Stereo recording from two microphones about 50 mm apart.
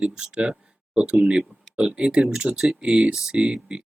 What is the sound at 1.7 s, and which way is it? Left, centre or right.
Speech, right.